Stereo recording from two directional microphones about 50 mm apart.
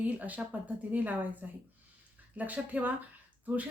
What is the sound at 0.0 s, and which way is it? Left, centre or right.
Speech, right.